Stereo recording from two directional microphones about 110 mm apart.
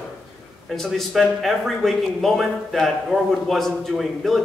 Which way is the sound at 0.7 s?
5° left (ahead or behind).